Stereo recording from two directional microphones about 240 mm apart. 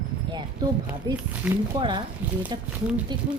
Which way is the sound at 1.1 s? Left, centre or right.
Centre.